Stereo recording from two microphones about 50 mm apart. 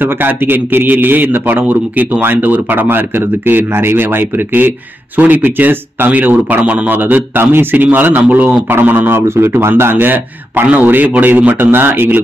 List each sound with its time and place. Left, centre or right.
0.0 s a man's voice: right
9.3 s a man's voice: right